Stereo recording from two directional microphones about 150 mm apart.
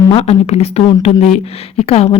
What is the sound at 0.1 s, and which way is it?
Speech, 45° left (ahead or behind).